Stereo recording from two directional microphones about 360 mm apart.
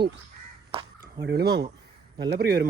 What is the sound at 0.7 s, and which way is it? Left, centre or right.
Caw, centre.